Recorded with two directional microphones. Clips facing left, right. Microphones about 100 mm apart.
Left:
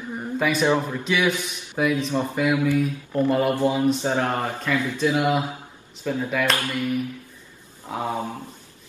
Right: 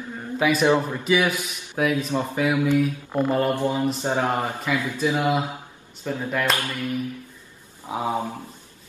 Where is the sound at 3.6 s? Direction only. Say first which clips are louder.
Left 2 dB; 15° left (ahead or behind).